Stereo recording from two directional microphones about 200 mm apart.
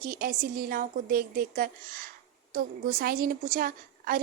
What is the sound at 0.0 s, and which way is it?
A woman's voice, 45° right (ahead or behind).